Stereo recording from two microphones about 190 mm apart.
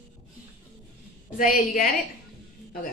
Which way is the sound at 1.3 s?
45° left (ahead or behind).